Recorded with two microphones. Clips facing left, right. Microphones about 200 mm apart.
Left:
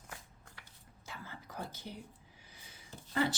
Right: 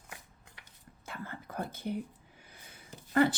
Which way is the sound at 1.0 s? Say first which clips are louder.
Right 6 dB; 55° right (ahead or behind).